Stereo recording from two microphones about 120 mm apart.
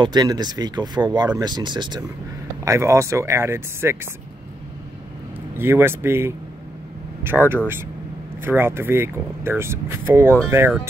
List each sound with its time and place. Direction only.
0.0 s speech: 35° right (ahead or behind)
2.6 s speech: 25° right (ahead or behind)
5.6 s speech: 20° right (ahead or behind)